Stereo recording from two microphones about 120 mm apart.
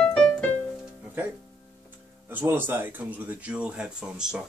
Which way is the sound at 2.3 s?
15° right (ahead or behind).